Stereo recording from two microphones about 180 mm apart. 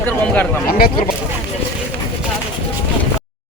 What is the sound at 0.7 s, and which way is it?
Speech, 55° left (ahead or behind).